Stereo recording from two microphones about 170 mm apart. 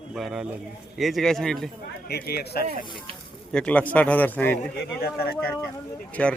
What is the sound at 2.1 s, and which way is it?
Speech, 65° left (ahead or behind).